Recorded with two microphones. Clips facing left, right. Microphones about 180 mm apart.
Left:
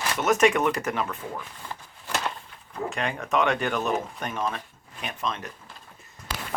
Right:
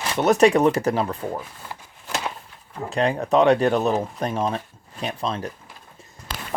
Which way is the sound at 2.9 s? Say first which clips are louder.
Right 8 dB; 35° right (ahead or behind).